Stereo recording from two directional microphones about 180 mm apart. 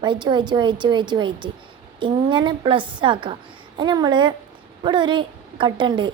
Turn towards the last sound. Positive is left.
turn(degrees=-25)  # may be behind; listen again after turning